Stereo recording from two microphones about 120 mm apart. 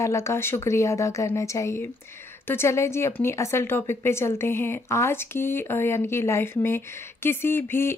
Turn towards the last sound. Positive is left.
turn(degrees=20)  # may be behind; listen again after turning